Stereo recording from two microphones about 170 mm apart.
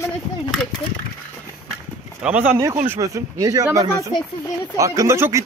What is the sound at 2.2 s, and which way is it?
Speech, 5° right (ahead or behind).